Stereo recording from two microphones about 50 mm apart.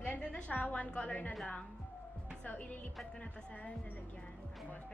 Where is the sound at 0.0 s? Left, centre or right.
Left.